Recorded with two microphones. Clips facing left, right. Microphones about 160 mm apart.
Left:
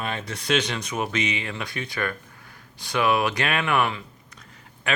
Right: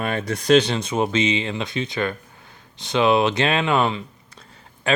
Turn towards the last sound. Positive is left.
turn(degrees=-30)  # may be behind; listen again after turning